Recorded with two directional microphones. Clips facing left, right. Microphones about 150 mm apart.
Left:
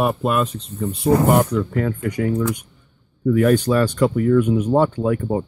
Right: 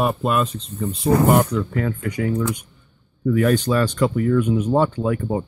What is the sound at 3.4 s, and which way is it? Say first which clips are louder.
Speech: left 2 dB; 10° left (ahead or behind).